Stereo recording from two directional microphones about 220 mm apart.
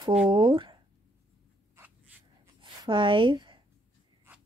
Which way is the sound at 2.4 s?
20° right (ahead or behind).